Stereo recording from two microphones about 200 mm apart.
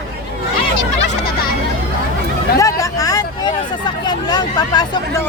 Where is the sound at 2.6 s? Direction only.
15° left (ahead or behind).